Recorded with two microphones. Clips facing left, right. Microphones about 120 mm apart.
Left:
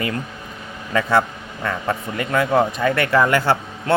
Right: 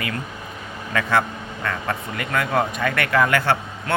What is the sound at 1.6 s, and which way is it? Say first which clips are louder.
Speech: left 3 dB; 25° left (ahead or behind).